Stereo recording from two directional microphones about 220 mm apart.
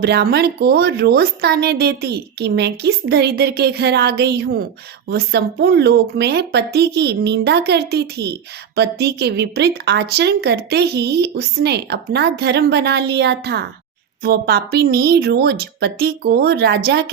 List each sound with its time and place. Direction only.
0.0 s speech: 45° right (ahead or behind)